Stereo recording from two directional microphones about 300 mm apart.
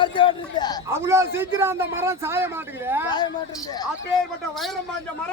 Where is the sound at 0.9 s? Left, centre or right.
Centre.